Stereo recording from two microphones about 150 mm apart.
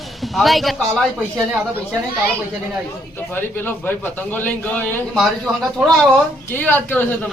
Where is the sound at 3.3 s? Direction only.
10° left (ahead or behind).